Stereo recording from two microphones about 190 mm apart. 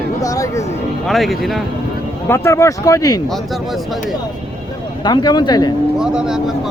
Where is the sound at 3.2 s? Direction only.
Centre (ahead or behind).